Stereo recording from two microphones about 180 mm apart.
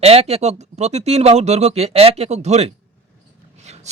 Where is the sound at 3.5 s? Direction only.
40° right (ahead or behind).